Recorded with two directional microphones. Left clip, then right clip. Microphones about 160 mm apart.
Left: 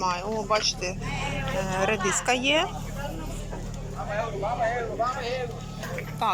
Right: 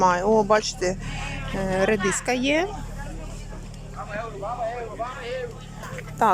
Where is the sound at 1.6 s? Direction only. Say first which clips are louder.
Right 4 dB; 30° right (ahead or behind).